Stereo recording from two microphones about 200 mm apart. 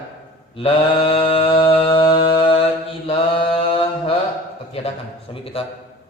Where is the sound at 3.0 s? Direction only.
25° left (ahead or behind).